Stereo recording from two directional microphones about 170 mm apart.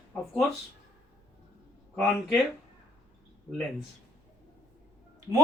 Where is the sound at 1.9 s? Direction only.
5° left (ahead or behind).